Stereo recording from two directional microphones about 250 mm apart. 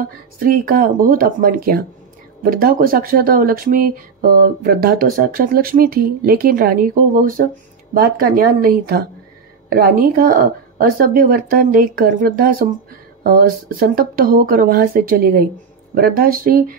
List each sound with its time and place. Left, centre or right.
0.0 s speech: right